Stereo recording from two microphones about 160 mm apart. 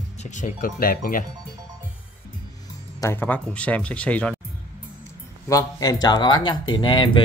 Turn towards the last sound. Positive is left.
turn(degrees=30)  # may be behind; listen again after turning